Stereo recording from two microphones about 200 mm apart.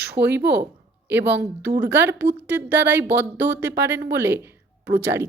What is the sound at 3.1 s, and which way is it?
Speech, 60° right (ahead or behind).